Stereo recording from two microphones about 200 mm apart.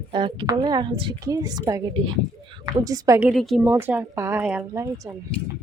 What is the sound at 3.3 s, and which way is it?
Speech, centre (ahead or behind).